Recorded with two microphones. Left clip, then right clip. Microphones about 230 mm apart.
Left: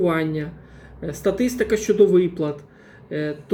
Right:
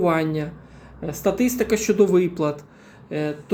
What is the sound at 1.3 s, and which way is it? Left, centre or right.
Speech, centre.